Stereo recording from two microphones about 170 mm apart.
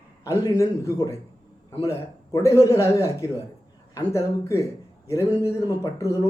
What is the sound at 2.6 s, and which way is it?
A man's voice, 20° left (ahead or behind).